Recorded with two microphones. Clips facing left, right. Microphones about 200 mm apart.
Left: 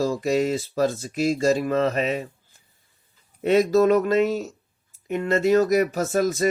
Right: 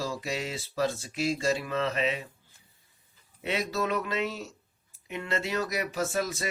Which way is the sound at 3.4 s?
45° left (ahead or behind).